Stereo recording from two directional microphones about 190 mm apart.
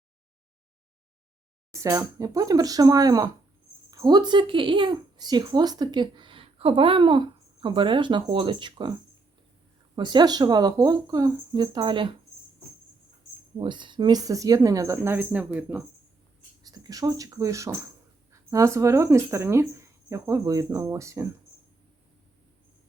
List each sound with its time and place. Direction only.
1.7 s speech: 15° right (ahead or behind)
9.9 s speech: 25° right (ahead or behind)
13.6 s speech: 25° right (ahead or behind); by 15.8 s 10° right (ahead or behind)
16.6 s speech: 20° right (ahead or behind)